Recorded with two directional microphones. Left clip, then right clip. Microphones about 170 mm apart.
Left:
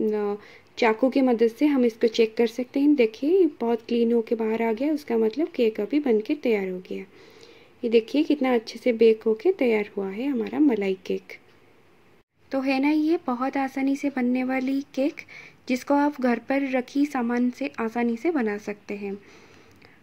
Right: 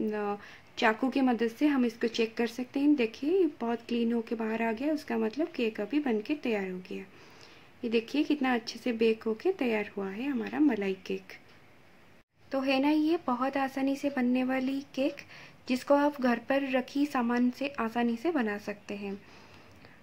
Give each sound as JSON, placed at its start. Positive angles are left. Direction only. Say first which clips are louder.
{"t": 0.0, "sound": "a woman's voice", "louder": "left 7 dB", "side_deg": 15}
{"t": 12.4, "sound": "a woman's voice", "louder": "left 4 dB", "side_deg": 15}